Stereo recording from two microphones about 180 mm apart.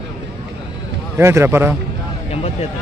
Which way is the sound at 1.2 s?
15° right (ahead or behind).